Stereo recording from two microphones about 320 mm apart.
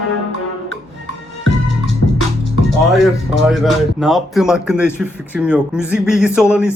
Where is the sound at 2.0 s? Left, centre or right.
Left.